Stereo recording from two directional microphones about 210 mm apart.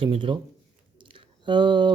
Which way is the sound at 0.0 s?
25° right (ahead or behind).